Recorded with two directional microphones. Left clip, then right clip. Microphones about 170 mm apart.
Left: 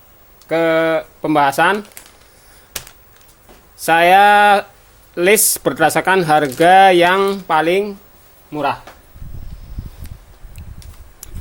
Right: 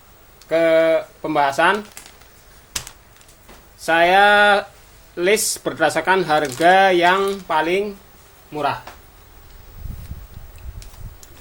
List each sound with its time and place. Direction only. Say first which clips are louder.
0.4 s speech: even; 70° left (ahead or behind)
3.8 s speech: left 4 dB; 65° left (ahead or behind)